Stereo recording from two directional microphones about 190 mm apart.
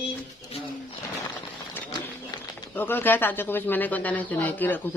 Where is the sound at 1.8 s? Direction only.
10° left (ahead or behind).